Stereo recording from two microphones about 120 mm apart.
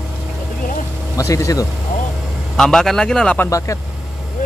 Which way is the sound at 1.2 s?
25° left (ahead or behind).